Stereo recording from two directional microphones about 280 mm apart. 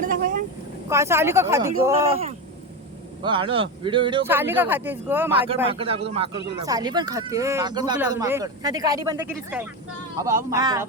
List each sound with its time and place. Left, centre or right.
0.0 s vehicle: right
0.9 s speech: centre
3.2 s speech: centre
5.6 s speech: centre